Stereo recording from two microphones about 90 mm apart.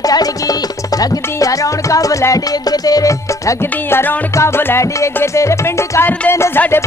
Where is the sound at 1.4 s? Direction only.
40° left (ahead or behind).